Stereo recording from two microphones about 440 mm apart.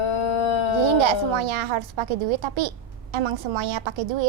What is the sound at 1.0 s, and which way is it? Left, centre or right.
A woman's voice, right.